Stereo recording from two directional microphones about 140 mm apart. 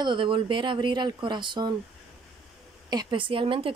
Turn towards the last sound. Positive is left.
turn(degrees=-40)  # may be behind; listen again after turning